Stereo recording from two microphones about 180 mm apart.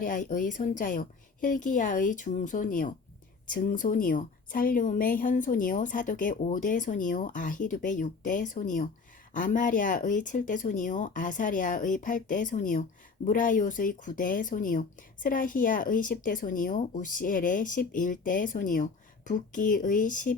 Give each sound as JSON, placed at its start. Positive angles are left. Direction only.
{"t": 0.0, "sound": "speech", "side_deg": 50}